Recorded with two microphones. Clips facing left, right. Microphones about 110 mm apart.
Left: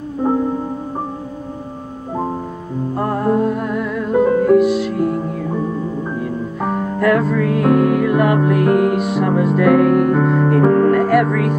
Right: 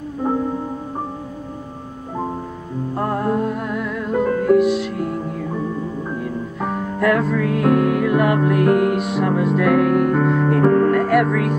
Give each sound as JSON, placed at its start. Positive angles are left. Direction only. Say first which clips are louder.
{"t": 0.2, "sound": "music", "louder": "left 4 dB", "side_deg": 15}
{"t": 2.9, "sound": "music", "louder": "left 3 dB", "side_deg": 0}